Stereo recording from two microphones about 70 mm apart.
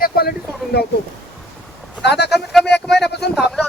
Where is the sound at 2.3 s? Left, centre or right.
Centre.